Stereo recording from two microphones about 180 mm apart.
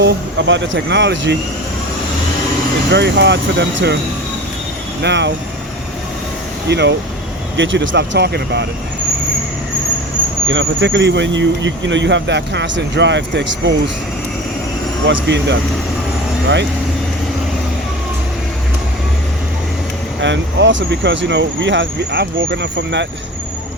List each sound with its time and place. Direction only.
0.0 s speech: 90° right
2.9 s speech: 70° right (ahead or behind)
5.0 s speech: 75° right (ahead or behind)
6.7 s speech: 70° right (ahead or behind)
7.5 s speech: 90° right; by 8.6 s 70° right (ahead or behind)
10.5 s speech: 85° right
15.0 s speech: 80° right
20.2 s speech: 85° right